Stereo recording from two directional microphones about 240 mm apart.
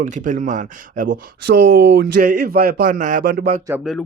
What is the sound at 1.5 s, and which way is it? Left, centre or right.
Speech, right.